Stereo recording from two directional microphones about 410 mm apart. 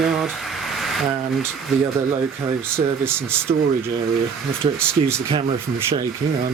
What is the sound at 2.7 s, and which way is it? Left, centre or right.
Speech, centre.